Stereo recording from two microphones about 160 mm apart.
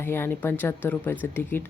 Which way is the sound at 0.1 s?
15° left (ahead or behind).